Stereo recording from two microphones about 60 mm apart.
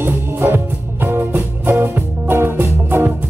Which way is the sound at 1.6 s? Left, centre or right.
Right.